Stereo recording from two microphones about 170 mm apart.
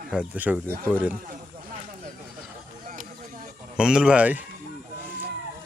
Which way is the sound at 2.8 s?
50° right (ahead or behind).